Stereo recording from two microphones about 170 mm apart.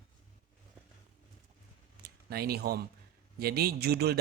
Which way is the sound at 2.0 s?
65° right (ahead or behind).